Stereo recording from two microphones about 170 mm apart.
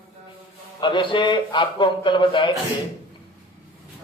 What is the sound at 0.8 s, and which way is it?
A man's voice, 30° left (ahead or behind).